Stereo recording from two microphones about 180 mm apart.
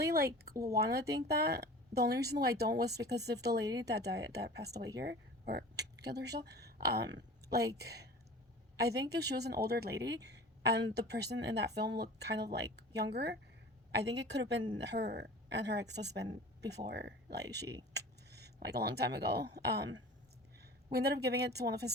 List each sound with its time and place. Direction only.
0.0 s a sound: 60° right (ahead or behind)
0.6 s a woman's voice: 60° right (ahead or behind)
13.9 s a woman's voice: 75° right (ahead or behind)